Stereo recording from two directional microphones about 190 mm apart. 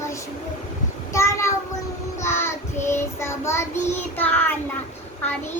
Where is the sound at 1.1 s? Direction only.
15° left (ahead or behind).